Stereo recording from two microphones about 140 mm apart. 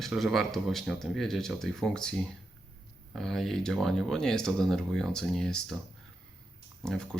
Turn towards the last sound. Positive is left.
turn(degrees=5)  # may be behind; listen again after turning